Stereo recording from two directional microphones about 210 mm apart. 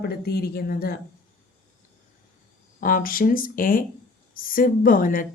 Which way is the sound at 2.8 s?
40° left (ahead or behind).